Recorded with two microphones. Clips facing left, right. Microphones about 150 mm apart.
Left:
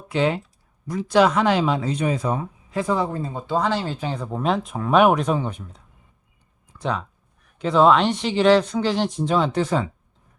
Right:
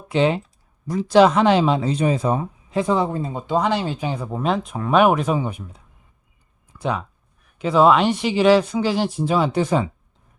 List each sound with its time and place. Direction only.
0.1 s speech: 25° right (ahead or behind)